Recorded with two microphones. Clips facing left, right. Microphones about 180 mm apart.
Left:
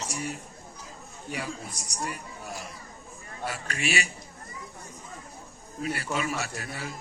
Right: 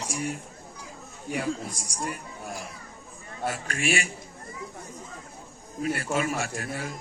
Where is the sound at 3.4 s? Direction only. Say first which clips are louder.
Right 3 dB; 50° right (ahead or behind).